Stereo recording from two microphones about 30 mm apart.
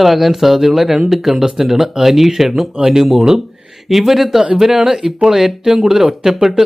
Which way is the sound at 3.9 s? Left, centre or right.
Centre.